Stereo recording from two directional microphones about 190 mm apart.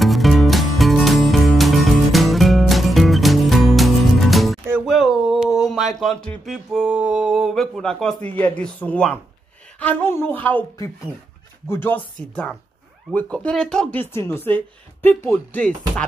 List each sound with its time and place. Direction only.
0.0 s music: centre (ahead or behind)
4.8 s a sound: centre (ahead or behind)
9.8 s speech: 10° left (ahead or behind)